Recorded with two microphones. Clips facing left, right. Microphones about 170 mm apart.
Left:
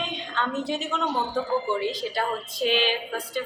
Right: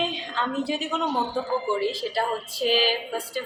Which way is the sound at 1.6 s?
5° right (ahead or behind).